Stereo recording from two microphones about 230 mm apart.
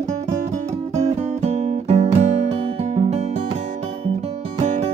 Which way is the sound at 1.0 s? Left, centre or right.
Right.